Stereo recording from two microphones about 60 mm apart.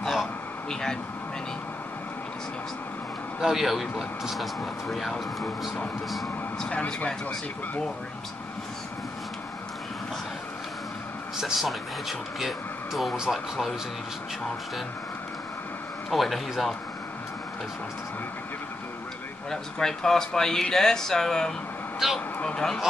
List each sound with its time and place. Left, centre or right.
0.7 s speech: centre
3.3 s speech: centre
6.7 s speech: left
11.3 s speech: centre
16.1 s speech: centre
19.5 s speech: centre